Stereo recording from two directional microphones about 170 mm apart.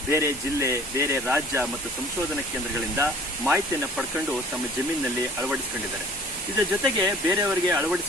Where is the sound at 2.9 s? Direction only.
10° right (ahead or behind).